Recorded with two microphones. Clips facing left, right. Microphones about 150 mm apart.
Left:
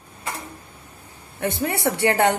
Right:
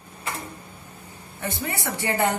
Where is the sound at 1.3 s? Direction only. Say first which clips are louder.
Left 6 dB; 60° left (ahead or behind).